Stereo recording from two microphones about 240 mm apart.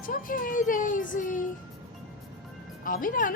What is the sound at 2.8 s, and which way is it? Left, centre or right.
Speech, left.